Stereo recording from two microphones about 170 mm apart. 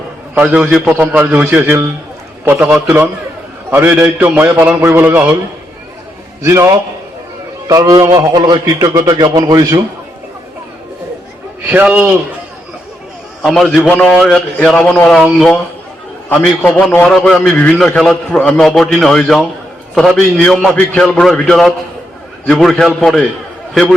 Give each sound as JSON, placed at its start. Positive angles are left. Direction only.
{"t": 0.3, "sound": "a man's voice", "side_deg": -5}
{"t": 6.4, "sound": "a man's voice", "side_deg": -15}
{"t": 11.7, "sound": "a man's voice", "side_deg": -10}
{"t": 13.4, "sound": "a man's voice", "side_deg": 0}